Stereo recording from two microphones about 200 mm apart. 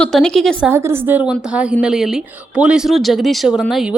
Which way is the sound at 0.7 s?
10° right (ahead or behind).